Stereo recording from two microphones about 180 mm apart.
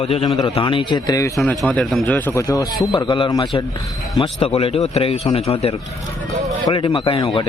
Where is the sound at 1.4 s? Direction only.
5° left (ahead or behind).